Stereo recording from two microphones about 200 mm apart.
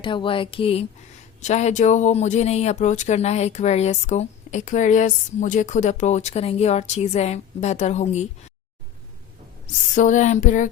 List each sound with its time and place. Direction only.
0.0 s speech: 25° left (ahead or behind)
9.6 s speech: 40° left (ahead or behind)